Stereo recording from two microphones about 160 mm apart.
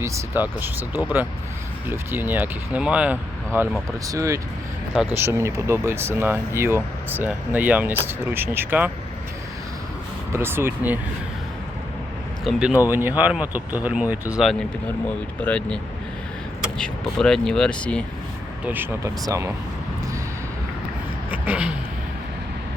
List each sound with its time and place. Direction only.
0.0 s speech: 10° right (ahead or behind)
10.3 s speech: 15° right (ahead or behind)
12.5 s speech: 5° right (ahead or behind)
15.4 s speech: 10° left (ahead or behind)
18.6 s speech: 10° right (ahead or behind)
21.2 s a sound: 10° right (ahead or behind)